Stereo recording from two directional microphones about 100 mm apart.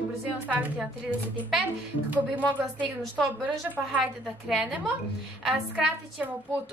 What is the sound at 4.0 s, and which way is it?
Speech, 5° right (ahead or behind).